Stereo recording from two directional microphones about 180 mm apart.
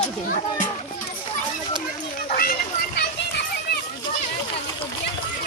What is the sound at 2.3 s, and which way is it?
Children playing, 55° left (ahead or behind).